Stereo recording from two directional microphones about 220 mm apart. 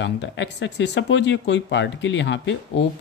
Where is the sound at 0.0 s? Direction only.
55° left (ahead or behind).